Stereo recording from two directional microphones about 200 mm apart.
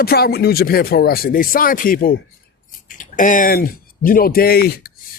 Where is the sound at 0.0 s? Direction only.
50° left (ahead or behind).